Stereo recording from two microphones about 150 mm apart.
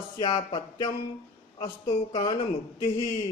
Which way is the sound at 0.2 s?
30° left (ahead or behind).